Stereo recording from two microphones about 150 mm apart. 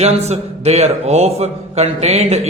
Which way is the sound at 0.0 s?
45° right (ahead or behind).